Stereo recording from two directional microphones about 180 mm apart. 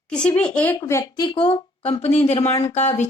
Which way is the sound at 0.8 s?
20° left (ahead or behind).